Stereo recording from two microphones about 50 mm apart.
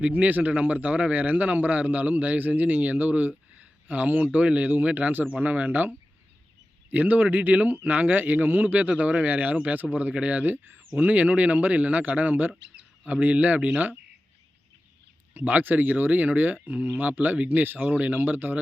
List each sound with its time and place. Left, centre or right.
0.0 s speech: right
6.9 s speech: right
15.3 s speech: right